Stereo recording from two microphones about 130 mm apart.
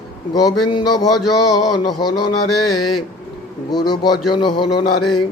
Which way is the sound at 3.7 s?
35° left (ahead or behind).